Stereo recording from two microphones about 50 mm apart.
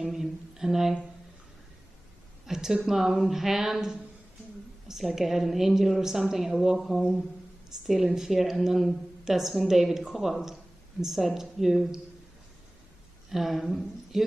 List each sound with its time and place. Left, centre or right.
0.0 s speech: centre
2.4 s a woman's voice: centre
13.3 s a woman's voice: centre